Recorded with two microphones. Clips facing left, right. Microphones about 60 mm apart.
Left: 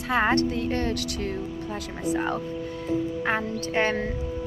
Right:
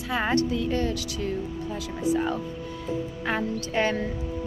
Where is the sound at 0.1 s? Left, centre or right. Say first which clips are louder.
Left 2 dB; left.